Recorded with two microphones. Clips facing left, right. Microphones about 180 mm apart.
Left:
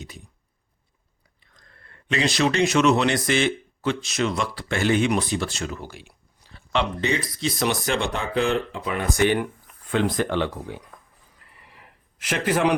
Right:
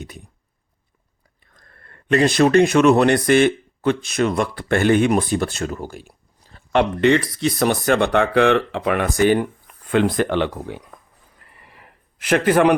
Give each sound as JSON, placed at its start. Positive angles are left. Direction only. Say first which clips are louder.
{"t": 1.5, "sound": "speech", "louder": "right 3 dB", "side_deg": -55}
{"t": 7.0, "sound": "speech", "louder": "right 9 dB", "side_deg": -65}
{"t": 9.1, "sound": "speech", "louder": "right 4 dB", "side_deg": -40}
{"t": 9.9, "sound": "speech", "louder": "right 5 dB", "side_deg": -60}
{"t": 11.3, "sound": "a sound", "louder": "right 3 dB", "side_deg": -55}